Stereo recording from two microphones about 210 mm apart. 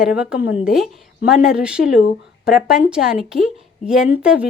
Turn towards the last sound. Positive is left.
turn(degrees=-5)  # may be behind; listen again after turning